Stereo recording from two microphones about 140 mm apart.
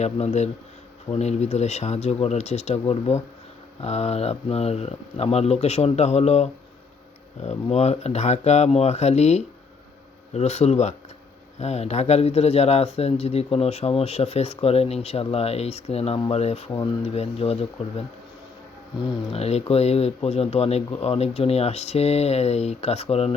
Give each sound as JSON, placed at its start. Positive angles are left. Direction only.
{"t": 0.0, "sound": "speech", "side_deg": 55}
{"t": 19.3, "sound": "speech", "side_deg": 45}